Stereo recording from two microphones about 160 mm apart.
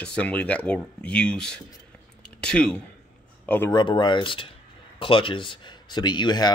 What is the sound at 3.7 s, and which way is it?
Speech, 30° left (ahead or behind).